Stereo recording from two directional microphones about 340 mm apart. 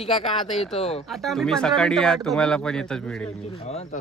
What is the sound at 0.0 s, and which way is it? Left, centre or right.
Speech, centre.